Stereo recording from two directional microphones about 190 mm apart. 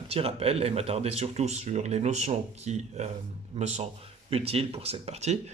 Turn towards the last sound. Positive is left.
turn(degrees=-35)  # may be behind; listen again after turning